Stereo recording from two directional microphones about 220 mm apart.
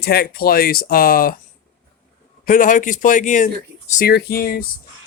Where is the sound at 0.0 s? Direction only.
45° left (ahead or behind).